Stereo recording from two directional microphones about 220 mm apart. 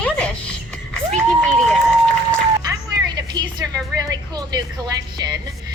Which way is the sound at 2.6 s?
20° right (ahead or behind).